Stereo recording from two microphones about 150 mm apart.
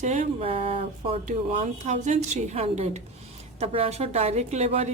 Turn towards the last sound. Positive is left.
turn(degrees=-45)  # may be behind; listen again after turning